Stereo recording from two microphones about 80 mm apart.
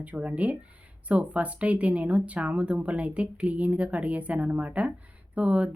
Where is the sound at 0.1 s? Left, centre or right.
Centre.